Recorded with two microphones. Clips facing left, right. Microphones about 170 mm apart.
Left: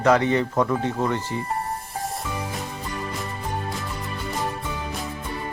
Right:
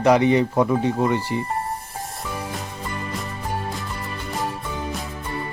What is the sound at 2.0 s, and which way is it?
Music, centre (ahead or behind).